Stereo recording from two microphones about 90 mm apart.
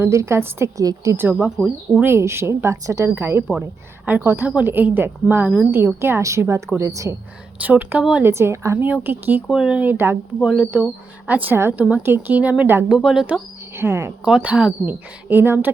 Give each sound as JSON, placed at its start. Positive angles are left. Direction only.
{"t": 0.0, "sound": "a woman's voice", "side_deg": -30}
{"t": 0.8, "sound": "speech", "side_deg": -40}
{"t": 1.1, "sound": "a woman's voice", "side_deg": -20}
{"t": 1.5, "sound": "speech", "side_deg": -10}
{"t": 2.0, "sound": "a woman's voice", "side_deg": -30}
{"t": 7.6, "sound": "speech", "side_deg": -20}
{"t": 8.2, "sound": "a woman's voice", "side_deg": -30}
{"t": 9.5, "sound": "speech", "side_deg": -10}
{"t": 10.4, "sound": "speech", "side_deg": -10}
{"t": 11.3, "sound": "a woman's voice", "side_deg": -20}
{"t": 12.9, "sound": "speech", "side_deg": -5}
{"t": 13.7, "sound": "a woman's voice", "side_deg": -30}
{"t": 14.3, "sound": "a woman's voice", "side_deg": -10}